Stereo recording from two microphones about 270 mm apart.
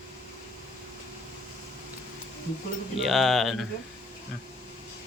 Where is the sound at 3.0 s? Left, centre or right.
Centre.